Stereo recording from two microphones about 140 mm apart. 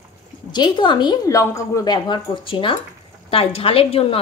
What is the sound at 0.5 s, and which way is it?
A woman's voice, 35° left (ahead or behind).